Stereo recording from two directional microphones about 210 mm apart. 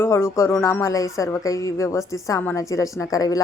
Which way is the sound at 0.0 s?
10° left (ahead or behind).